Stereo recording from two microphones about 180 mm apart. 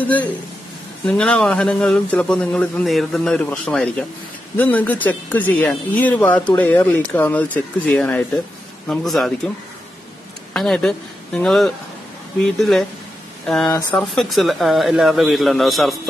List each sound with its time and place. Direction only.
1.0 s speech: 5° left (ahead or behind)
10.5 s speech: centre (ahead or behind)
13.7 s speech: 20° left (ahead or behind)
13.9 s speech: centre (ahead or behind)